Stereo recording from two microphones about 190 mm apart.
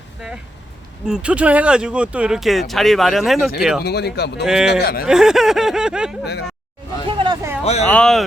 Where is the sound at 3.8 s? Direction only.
60° left (ahead or behind).